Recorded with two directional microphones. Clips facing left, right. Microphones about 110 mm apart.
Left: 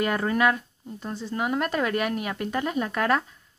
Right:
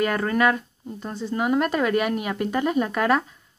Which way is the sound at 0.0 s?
5° left (ahead or behind).